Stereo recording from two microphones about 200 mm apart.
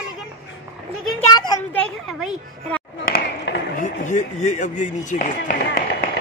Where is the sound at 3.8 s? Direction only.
35° left (ahead or behind).